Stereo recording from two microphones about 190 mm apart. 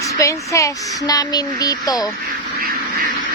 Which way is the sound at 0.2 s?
15° left (ahead or behind).